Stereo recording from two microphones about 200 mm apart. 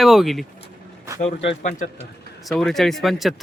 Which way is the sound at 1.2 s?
30° left (ahead or behind).